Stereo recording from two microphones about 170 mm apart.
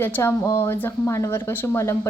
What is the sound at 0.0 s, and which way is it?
Speech, 15° left (ahead or behind).